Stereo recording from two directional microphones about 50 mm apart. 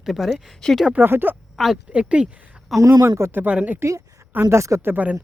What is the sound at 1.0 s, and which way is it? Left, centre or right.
Speech, right.